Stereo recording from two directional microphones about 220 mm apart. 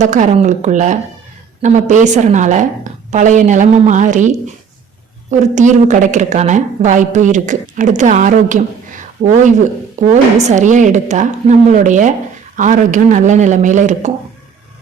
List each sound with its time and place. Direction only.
0.0 s a woman's voice: 35° right (ahead or behind)